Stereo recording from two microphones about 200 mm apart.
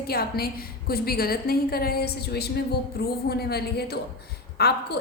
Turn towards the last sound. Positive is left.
turn(degrees=55)  # may be behind; listen again after turning